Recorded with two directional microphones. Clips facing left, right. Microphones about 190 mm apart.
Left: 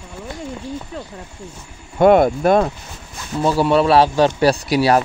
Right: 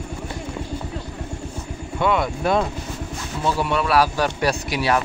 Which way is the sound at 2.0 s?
50° left (ahead or behind).